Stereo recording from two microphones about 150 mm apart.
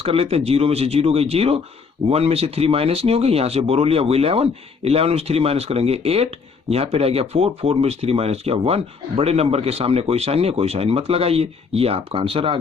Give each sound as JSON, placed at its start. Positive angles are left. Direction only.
{"t": 0.0, "sound": "speech", "side_deg": -40}